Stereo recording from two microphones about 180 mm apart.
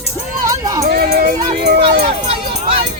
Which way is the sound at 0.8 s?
60° right (ahead or behind).